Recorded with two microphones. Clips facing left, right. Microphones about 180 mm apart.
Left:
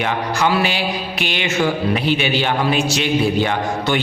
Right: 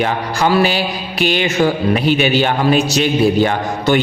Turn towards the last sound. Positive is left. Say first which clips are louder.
# right 4 dB
turn(degrees=-45)  # may be behind; listen again after turning